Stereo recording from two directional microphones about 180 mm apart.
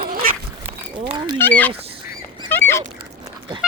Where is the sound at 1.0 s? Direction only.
25° right (ahead or behind).